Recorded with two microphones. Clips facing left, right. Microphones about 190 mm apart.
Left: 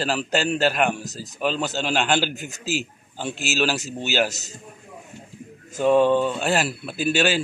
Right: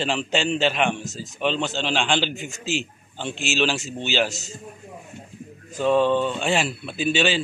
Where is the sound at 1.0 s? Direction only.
40° left (ahead or behind).